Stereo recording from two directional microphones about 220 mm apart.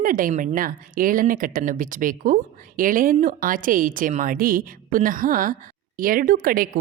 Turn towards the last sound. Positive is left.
turn(degrees=-40)  # may be behind; listen again after turning